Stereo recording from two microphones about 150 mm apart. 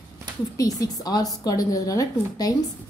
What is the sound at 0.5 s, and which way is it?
Speech, 25° left (ahead or behind).